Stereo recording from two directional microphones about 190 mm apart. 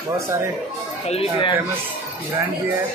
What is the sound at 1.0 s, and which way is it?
Speech, 30° left (ahead or behind).